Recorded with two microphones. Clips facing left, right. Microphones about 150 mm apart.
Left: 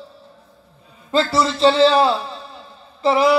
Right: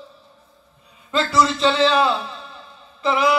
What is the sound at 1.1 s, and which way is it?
A man's voice, 30° left (ahead or behind).